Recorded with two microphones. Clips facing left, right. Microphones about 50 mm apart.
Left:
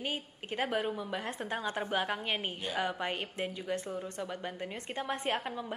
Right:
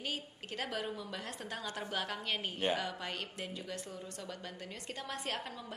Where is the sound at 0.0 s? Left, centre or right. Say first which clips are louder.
Left 3 dB; left.